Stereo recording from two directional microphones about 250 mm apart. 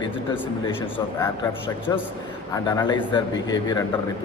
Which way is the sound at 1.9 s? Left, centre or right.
Centre.